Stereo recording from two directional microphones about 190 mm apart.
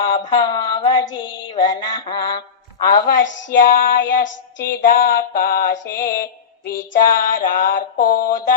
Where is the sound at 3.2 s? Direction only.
75° left (ahead or behind).